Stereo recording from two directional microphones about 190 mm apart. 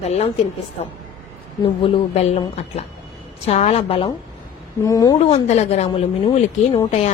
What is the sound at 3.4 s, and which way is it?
Speech, 35° left (ahead or behind).